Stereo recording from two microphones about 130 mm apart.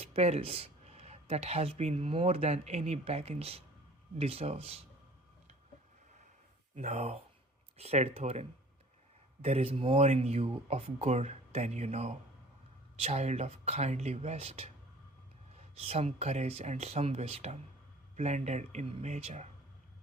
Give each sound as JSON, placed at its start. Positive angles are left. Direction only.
{"t": 0.0, "sound": "speech", "side_deg": -55}
{"t": 6.7, "sound": "speech", "side_deg": -60}